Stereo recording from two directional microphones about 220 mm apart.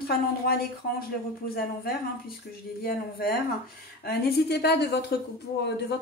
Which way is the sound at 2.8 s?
45° left (ahead or behind).